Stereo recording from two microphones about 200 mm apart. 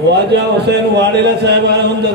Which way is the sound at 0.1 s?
55° right (ahead or behind).